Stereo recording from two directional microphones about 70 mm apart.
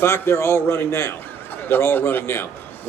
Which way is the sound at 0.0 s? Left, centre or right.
Left.